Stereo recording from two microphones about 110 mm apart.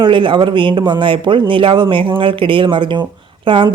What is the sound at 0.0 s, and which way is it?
Speech, 50° right (ahead or behind).